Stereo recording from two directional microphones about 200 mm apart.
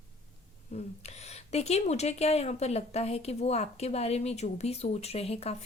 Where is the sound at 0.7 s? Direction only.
35° left (ahead or behind).